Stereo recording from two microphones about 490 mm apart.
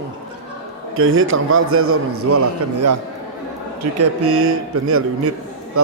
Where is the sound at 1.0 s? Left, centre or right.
Right.